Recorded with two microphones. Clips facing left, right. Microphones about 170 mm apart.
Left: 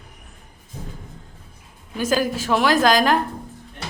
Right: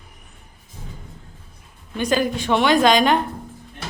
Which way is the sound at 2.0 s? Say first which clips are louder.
Right 1 dB; centre (ahead or behind).